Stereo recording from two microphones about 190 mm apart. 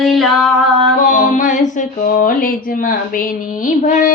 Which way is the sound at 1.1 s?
40° left (ahead or behind).